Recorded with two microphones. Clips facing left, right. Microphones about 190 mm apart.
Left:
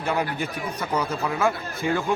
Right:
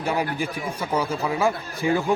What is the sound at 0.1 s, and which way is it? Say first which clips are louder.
A man's voice: even; 10° right (ahead or behind).